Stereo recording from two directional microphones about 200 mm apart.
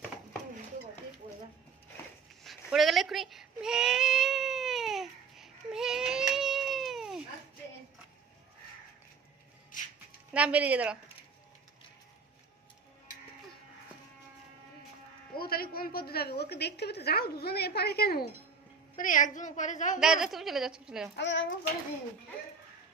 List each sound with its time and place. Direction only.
2.4 s baby cry: centre (ahead or behind)
10.3 s speech: 5° right (ahead or behind)
15.4 s a sound: 50° left (ahead or behind)
18.9 s a woman's voice: 40° left (ahead or behind)
20.0 s a woman's voice: centre (ahead or behind)
21.2 s a child's voice: 65° left (ahead or behind)